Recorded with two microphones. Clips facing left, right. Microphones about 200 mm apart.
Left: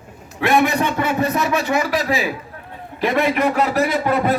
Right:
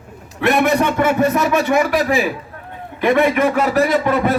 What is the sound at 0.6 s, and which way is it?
Speech, 50° right (ahead or behind).